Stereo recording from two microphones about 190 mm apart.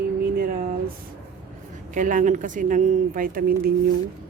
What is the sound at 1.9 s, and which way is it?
Speech, 45° right (ahead or behind).